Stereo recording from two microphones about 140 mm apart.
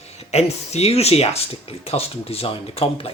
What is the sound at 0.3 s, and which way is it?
Speech, 50° left (ahead or behind).